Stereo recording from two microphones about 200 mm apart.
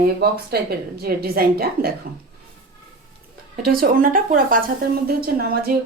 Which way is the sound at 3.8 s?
45° right (ahead or behind).